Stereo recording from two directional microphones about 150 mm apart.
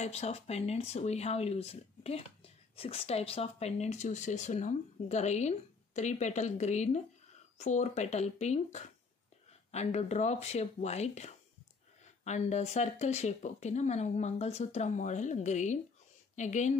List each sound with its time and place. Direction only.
0.0 s speech: 45° left (ahead or behind)